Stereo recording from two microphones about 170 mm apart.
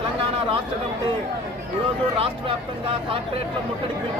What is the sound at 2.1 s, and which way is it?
Speech, 35° right (ahead or behind).